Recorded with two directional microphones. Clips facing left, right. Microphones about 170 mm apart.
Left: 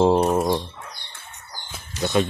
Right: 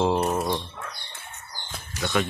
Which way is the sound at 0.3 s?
20° left (ahead or behind).